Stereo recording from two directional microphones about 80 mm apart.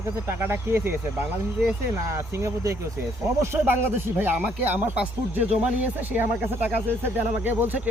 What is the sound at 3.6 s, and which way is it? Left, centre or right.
Speech, right.